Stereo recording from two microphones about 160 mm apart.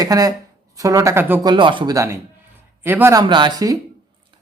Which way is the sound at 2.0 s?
15° right (ahead or behind).